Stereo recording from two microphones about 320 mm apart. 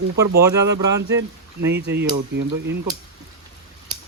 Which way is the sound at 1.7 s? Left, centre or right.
Right.